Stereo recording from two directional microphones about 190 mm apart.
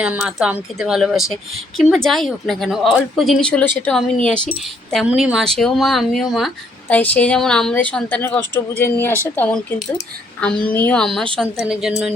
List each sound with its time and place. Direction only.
0.0 s a woman's voice: 5° right (ahead or behind)